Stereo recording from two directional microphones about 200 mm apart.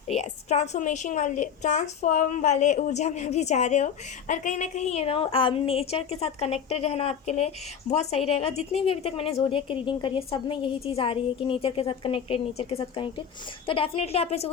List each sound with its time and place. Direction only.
0.1 s a woman's voice: 35° left (ahead or behind)